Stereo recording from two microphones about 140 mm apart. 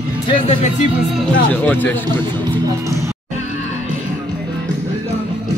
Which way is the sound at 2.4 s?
20° right (ahead or behind).